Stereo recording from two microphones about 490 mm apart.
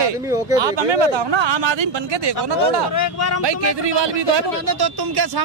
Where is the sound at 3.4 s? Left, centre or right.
Right.